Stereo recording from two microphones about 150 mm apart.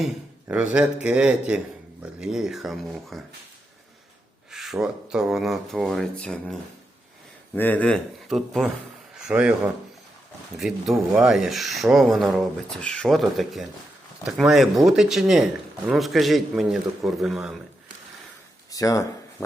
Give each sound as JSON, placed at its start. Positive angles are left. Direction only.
{"t": 0.4, "sound": "a man's voice", "side_deg": -5}
{"t": 4.5, "sound": "speech", "side_deg": 0}
{"t": 10.6, "sound": "speech", "side_deg": 0}
{"t": 18.7, "sound": "speech", "side_deg": 25}